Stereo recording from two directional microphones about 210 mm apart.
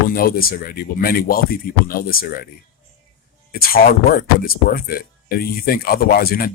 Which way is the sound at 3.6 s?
45° left (ahead or behind).